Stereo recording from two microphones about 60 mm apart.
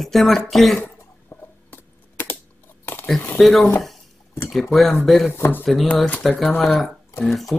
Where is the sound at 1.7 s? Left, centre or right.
Left.